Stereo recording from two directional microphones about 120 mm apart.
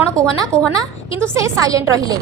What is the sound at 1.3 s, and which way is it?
Speech, 25° right (ahead or behind).